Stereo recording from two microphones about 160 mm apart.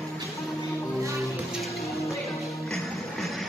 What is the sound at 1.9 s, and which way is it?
Music, 20° left (ahead or behind).